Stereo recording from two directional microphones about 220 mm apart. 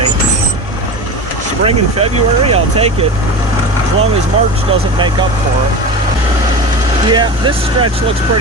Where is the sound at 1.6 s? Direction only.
25° right (ahead or behind).